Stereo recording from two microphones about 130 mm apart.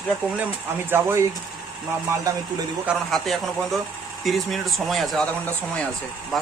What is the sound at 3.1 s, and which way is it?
Speech, centre (ahead or behind).